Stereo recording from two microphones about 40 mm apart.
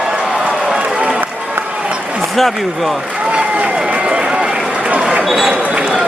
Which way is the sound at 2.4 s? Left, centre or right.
Centre.